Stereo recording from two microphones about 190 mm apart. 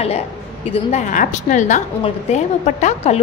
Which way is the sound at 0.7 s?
40° left (ahead or behind).